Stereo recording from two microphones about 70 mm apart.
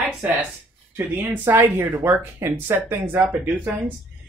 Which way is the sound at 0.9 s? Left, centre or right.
Right.